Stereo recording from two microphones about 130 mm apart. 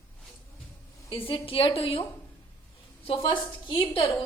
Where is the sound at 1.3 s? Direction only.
45° left (ahead or behind).